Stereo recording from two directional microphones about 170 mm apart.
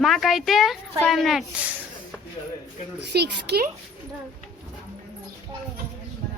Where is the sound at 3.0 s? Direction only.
80° right.